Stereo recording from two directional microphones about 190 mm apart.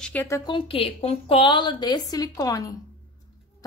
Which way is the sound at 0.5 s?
30° left (ahead or behind).